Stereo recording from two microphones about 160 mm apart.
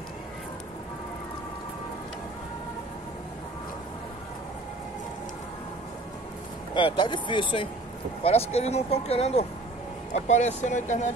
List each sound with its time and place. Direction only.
6.7 s speech: 30° left (ahead or behind); by 11.1 s 45° left (ahead or behind)